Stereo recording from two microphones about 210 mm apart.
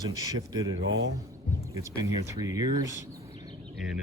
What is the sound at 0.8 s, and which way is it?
Speech, 65° right (ahead or behind).